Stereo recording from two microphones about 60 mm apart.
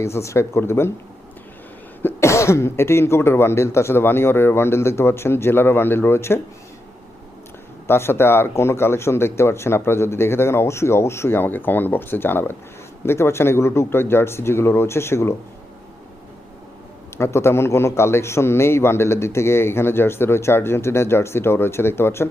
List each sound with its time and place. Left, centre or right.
0.0 s a man's voice: left
2.2 s a man's voice: left
7.9 s a man's voice: left
17.2 s a man's voice: left